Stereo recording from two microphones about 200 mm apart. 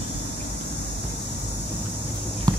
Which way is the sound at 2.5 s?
20° right (ahead or behind).